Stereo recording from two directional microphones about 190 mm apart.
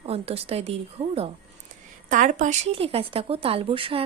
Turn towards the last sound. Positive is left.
turn(degrees=-30)  # may be behind; listen again after turning